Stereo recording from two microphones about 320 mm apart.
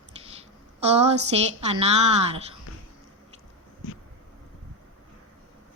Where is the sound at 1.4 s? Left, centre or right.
Centre.